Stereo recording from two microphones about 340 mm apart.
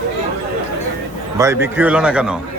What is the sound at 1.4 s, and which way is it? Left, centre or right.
Speech, centre.